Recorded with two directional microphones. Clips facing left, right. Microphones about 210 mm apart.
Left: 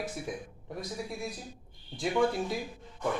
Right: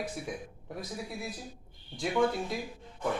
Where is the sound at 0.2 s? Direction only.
Centre (ahead or behind).